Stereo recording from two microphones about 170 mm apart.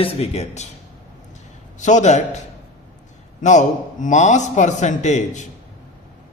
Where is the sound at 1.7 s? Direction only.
45° left (ahead or behind).